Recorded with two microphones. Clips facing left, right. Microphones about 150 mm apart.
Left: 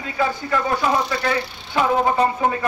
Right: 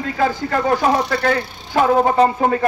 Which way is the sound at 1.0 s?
60° right (ahead or behind).